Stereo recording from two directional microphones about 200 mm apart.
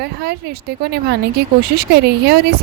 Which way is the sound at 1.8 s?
55° right (ahead or behind).